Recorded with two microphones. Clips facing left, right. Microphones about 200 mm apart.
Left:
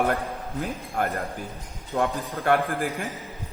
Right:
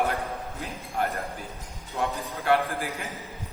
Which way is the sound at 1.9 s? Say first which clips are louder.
Left 4 dB; 50° left (ahead or behind).